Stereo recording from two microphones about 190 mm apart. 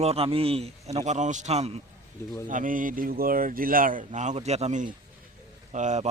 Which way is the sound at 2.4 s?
45° right (ahead or behind).